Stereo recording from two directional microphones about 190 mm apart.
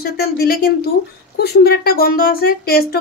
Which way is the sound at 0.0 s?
55° left (ahead or behind).